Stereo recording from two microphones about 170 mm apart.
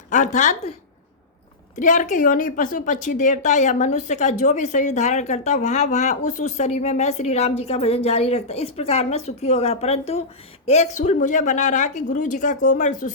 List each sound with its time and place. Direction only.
0.1 s a woman's voice: 45° left (ahead or behind)
1.7 s a woman's voice: 45° left (ahead or behind)